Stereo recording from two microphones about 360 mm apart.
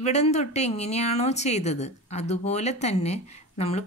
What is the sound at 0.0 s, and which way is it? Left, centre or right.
Speech, centre.